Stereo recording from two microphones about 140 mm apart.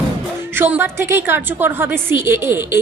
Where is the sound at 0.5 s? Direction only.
15° right (ahead or behind).